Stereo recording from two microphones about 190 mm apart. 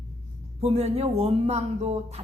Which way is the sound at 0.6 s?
35° right (ahead or behind).